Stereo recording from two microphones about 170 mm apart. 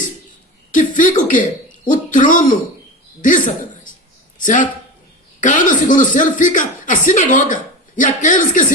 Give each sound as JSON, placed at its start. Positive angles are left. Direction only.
{"t": 0.7, "sound": "cough", "side_deg": 50}
{"t": 3.2, "sound": "speech", "side_deg": 50}